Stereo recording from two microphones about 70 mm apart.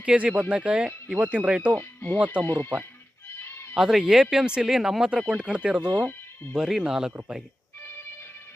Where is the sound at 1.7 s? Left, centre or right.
Left.